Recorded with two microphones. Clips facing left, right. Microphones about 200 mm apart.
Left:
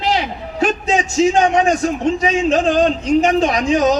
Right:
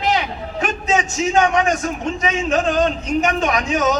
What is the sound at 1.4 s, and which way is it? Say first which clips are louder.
Speech: left 3 dB; 30° left (ahead or behind).